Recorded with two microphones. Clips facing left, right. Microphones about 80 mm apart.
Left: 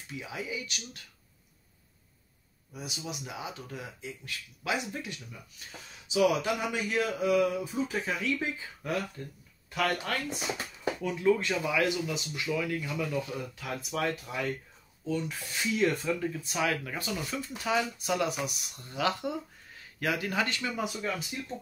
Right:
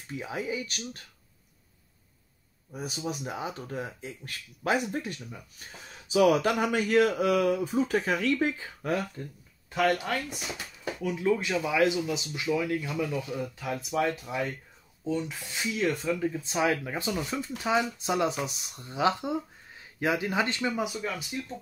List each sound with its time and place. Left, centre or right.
0.1 s speech: right
2.7 s speech: right
6.1 s speech: right
9.2 s speech: right
11.0 s speech: centre; by 14.0 s right
14.0 s speech: centre
15.8 s speech: centre
16.2 s speech: right
20.7 s speech: centre